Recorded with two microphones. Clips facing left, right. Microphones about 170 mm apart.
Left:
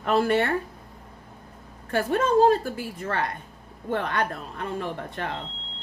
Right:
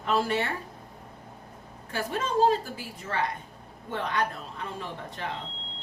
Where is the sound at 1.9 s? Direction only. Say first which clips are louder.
Left 7 dB; 55° left (ahead or behind).